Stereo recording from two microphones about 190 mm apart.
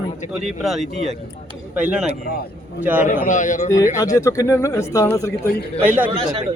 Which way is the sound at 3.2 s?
40° left (ahead or behind).